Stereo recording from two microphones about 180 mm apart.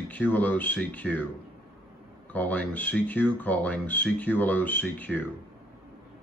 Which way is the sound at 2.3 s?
10° left (ahead or behind).